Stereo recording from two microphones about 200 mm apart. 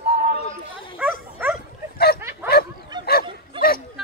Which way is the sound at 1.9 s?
50° left (ahead or behind).